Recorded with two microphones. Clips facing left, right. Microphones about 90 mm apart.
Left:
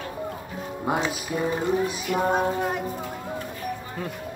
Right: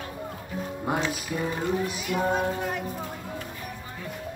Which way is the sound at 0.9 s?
15° left (ahead or behind).